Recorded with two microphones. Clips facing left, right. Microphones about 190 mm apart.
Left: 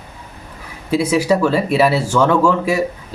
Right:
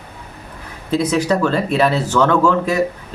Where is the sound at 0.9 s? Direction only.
10° left (ahead or behind).